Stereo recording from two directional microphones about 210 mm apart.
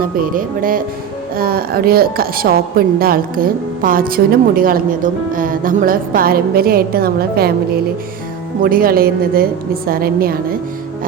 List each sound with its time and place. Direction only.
0.0 s a woman's voice: 40° right (ahead or behind)
8.6 s a woman's voice: 45° right (ahead or behind)